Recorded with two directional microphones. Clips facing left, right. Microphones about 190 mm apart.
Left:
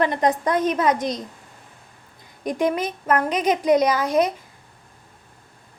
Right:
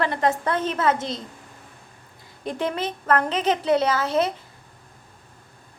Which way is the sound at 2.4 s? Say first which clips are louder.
Left 4 dB; 15° left (ahead or behind).